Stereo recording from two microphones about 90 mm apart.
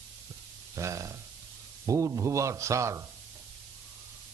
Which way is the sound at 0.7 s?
35° right (ahead or behind).